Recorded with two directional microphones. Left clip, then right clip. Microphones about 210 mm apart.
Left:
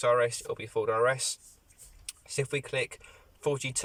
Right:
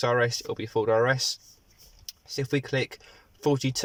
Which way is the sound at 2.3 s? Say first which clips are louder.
Right 3 dB; 30° right (ahead or behind).